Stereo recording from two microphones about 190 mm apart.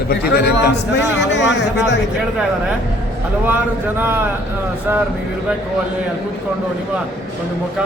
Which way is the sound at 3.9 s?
10° right (ahead or behind).